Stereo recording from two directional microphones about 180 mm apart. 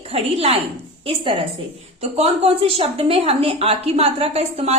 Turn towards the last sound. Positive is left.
turn(degrees=-35)  # may be behind; listen again after turning